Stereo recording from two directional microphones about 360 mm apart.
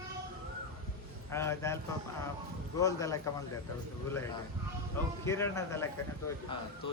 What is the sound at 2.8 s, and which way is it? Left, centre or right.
Speech, centre.